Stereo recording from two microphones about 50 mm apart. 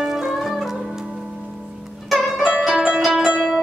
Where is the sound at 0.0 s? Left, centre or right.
Centre.